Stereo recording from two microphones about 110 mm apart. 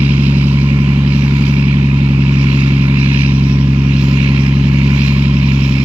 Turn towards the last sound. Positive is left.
turn(degrees=-10)  # may be behind; listen again after turning